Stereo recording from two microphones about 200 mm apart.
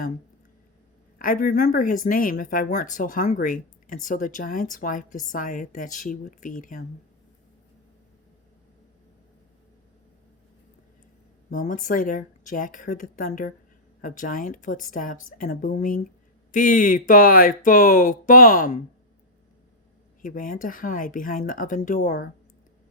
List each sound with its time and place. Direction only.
1.2 s speech: 40° left (ahead or behind)
11.5 s speech: 40° left (ahead or behind)
20.2 s speech: 40° left (ahead or behind)